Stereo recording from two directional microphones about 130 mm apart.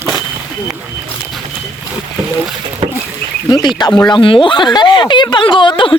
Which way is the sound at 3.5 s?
35° left (ahead or behind).